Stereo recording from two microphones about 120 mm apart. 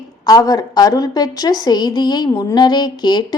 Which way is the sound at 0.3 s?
30° left (ahead or behind).